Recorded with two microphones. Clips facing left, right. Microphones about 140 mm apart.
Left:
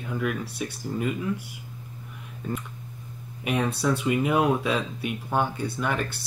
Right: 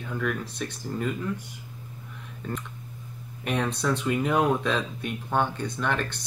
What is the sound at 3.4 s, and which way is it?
Speech, 5° left (ahead or behind).